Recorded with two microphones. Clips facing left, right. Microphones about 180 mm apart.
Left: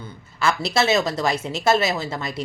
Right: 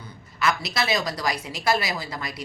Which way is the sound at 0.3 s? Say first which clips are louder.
Left 4 dB; 30° left (ahead or behind).